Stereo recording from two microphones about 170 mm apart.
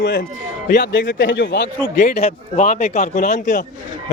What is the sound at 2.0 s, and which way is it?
A man's voice, 40° left (ahead or behind).